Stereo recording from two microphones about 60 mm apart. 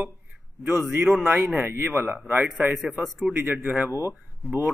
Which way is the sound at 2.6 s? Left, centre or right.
Centre.